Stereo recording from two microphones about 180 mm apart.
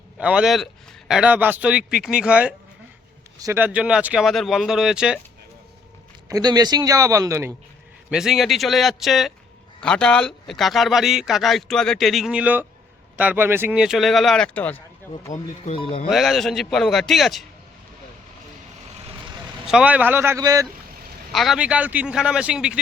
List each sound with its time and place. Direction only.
0.2 s speech: 5° right (ahead or behind)
6.2 s a man's voice: 20° right (ahead or behind)
8.1 s speech: centre (ahead or behind)
15.3 s speech: 35° left (ahead or behind)
16.0 s speech: centre (ahead or behind)
19.6 s speech: 5° right (ahead or behind)
21.3 s speech: centre (ahead or behind)